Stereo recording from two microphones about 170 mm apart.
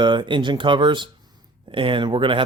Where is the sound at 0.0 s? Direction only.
30° right (ahead or behind).